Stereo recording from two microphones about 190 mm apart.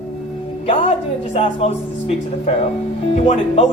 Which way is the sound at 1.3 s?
30° left (ahead or behind).